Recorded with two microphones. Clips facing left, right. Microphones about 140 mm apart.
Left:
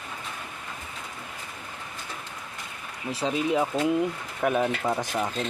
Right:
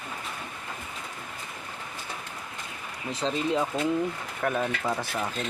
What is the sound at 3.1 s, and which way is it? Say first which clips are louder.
Speech: left 2 dB; 10° left (ahead or behind).